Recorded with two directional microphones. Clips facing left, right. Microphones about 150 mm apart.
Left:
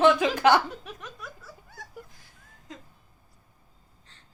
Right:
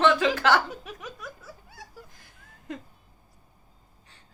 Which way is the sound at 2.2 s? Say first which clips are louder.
Right 8 dB; 60° right (ahead or behind).